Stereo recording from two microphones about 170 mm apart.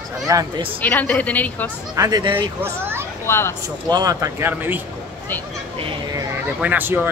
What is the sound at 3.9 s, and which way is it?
Speech, 20° right (ahead or behind).